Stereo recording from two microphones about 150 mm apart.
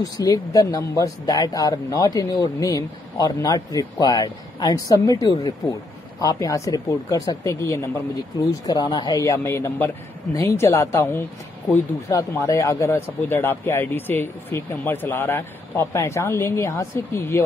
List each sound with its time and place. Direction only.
0.0 s speech: 25° left (ahead or behind)